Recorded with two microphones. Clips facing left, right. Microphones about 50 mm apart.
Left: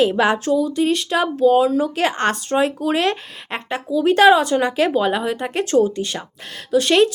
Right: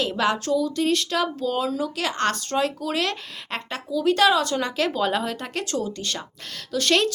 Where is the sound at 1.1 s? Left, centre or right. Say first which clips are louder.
Left 9 dB; left.